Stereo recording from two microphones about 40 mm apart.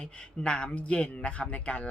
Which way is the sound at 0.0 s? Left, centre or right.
Left.